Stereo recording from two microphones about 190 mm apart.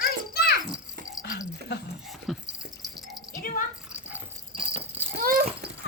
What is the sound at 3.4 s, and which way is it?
Rattle, 45° left (ahead or behind).